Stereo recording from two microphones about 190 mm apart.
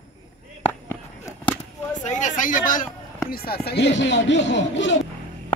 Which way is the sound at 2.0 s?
40° left (ahead or behind).